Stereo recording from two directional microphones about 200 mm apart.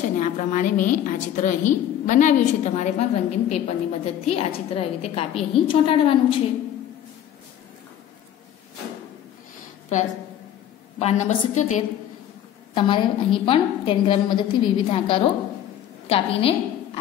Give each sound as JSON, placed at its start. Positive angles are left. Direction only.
{"t": 0.2, "sound": "a woman's voice", "side_deg": 40}
{"t": 11.0, "sound": "a woman's voice", "side_deg": 35}
{"t": 12.7, "sound": "a woman's voice", "side_deg": 25}